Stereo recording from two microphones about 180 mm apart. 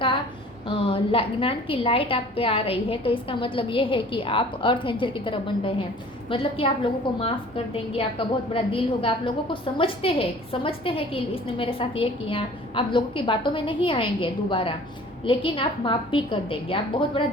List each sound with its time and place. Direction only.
0.9 s a woman's voice: 30° left (ahead or behind)